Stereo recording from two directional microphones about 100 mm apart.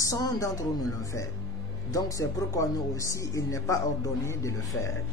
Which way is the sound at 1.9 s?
35° left (ahead or behind).